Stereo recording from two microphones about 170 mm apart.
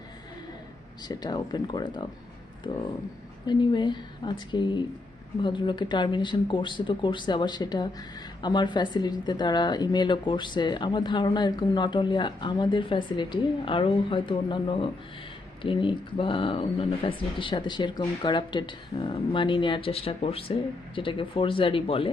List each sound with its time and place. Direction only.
1.0 s speech: 25° left (ahead or behind)
3.4 s speech: 25° left (ahead or behind)